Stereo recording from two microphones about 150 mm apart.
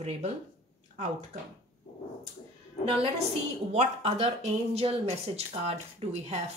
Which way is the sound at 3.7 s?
45° right (ahead or behind).